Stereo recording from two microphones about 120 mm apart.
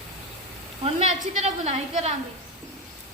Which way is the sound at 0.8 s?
65° right (ahead or behind).